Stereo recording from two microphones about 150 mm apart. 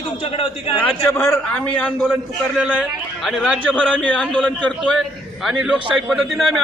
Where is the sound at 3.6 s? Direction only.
10° left (ahead or behind).